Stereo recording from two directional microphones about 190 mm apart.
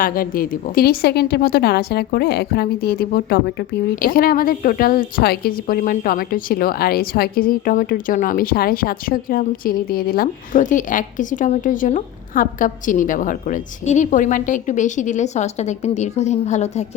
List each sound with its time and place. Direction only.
0.0 s a woman's voice: 50° left (ahead or behind)